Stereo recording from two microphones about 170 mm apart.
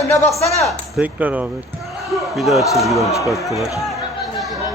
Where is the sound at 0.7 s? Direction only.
5° right (ahead or behind).